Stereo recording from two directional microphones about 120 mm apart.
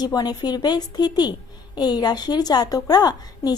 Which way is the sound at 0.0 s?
35° left (ahead or behind).